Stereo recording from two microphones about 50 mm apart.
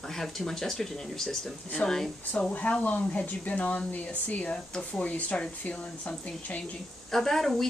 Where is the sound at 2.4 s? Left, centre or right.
Left.